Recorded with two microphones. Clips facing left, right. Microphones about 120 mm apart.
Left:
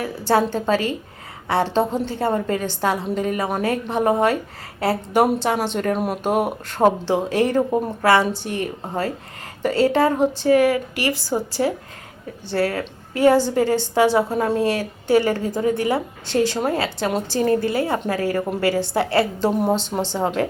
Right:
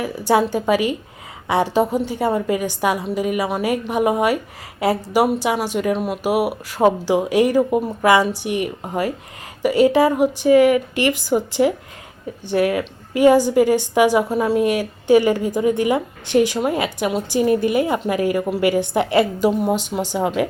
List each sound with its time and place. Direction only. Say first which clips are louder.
0.0 s speech: right 2 dB; 15° right (ahead or behind)